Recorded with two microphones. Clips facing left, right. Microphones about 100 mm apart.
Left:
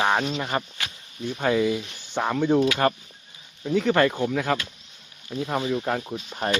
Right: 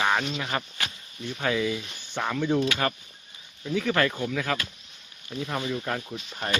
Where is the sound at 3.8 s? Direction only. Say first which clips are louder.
Left 4 dB; 20° left (ahead or behind).